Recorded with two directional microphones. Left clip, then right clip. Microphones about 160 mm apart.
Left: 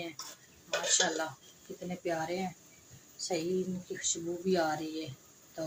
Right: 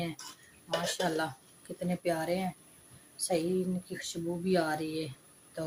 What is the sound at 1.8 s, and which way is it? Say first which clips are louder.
Speech: right 3 dB; 90° right.